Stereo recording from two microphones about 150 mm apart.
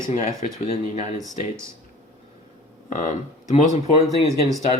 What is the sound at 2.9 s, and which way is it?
Speech, 55° left (ahead or behind).